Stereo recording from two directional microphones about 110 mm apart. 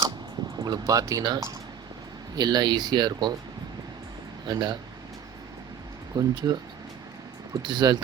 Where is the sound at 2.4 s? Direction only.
40° right (ahead or behind).